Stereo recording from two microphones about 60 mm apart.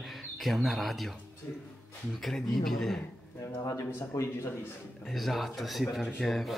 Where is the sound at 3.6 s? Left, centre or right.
Left.